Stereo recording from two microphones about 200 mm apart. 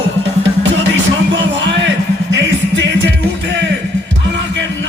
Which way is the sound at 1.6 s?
60° right (ahead or behind).